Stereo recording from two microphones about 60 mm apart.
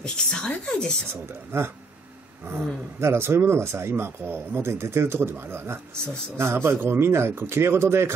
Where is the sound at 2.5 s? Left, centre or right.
Right.